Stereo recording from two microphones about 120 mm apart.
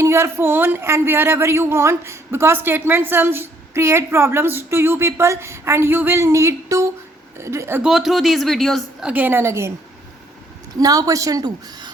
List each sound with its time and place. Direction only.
0.0 s speech: 20° right (ahead or behind)
7.8 s speech: 5° right (ahead or behind)
9.0 s speech: 15° right (ahead or behind)
10.8 s a woman's voice: 30° right (ahead or behind)